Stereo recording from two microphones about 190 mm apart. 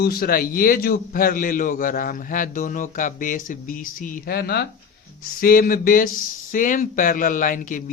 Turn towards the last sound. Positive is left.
turn(degrees=45)  # may be behind; listen again after turning